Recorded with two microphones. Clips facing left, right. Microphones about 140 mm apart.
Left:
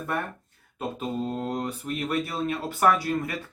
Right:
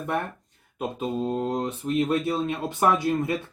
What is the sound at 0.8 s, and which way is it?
Speech, 20° right (ahead or behind).